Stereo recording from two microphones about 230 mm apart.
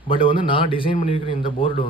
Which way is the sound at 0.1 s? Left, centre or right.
Left.